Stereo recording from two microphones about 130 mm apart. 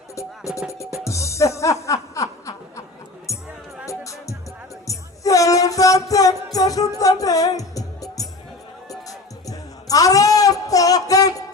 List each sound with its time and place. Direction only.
0.2 s music: 25° left (ahead or behind)
1.9 s snicker: 25° left (ahead or behind)
3.3 s music: 25° left (ahead or behind)